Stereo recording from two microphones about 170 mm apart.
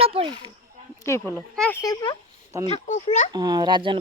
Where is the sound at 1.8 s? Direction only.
25° left (ahead or behind).